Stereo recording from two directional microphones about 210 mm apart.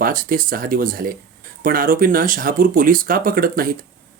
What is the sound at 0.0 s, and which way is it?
Speech, 45° right (ahead or behind).